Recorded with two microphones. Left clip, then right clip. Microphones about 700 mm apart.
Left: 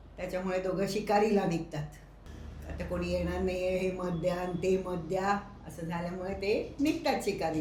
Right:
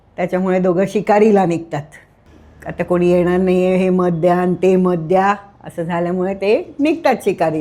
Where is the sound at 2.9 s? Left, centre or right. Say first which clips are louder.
Right 19 dB; right.